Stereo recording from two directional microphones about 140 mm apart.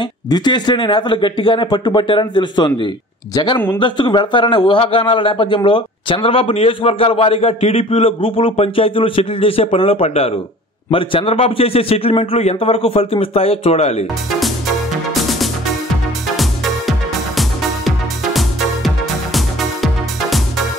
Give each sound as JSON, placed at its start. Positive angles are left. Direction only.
{"t": 0.0, "sound": "a man's voice", "side_deg": 30}
{"t": 15.2, "sound": "music", "side_deg": 0}
{"t": 17.4, "sound": "music", "side_deg": 0}